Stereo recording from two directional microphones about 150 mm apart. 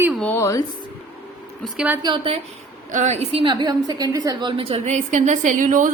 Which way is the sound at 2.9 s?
50° right (ahead or behind).